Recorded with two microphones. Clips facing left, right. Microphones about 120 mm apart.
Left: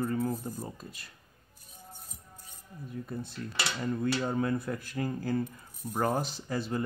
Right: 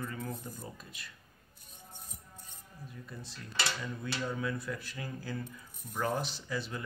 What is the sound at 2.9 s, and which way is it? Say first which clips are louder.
Speech: left 11 dB; 50° left (ahead or behind).